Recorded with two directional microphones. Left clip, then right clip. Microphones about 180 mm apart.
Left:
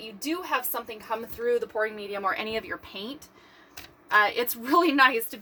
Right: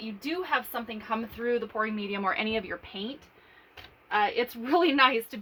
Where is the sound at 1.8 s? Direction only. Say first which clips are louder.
Left 2 dB; 30° right (ahead or behind).